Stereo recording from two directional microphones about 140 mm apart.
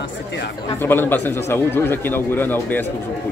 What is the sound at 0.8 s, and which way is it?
A man's voice, 15° left (ahead or behind).